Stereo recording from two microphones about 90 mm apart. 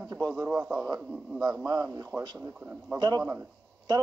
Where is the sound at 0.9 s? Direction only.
45° right (ahead or behind).